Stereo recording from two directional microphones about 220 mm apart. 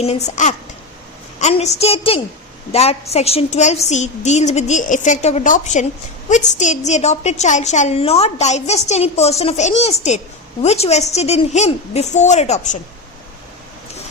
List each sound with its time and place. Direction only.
0.0 s a woman's voice: 30° left (ahead or behind)